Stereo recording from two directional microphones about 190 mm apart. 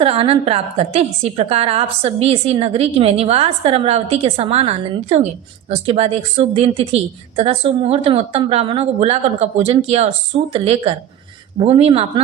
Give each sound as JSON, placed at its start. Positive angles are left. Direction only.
{"t": 0.0, "sound": "a woman's voice", "side_deg": -30}